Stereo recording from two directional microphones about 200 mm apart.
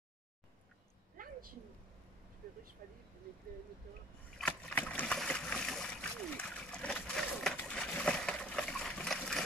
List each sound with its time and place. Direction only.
1.1 s a sound: 45° right (ahead or behind)
2.8 s speech: 45° right (ahead or behind)
4.4 s splash: 10° left (ahead or behind)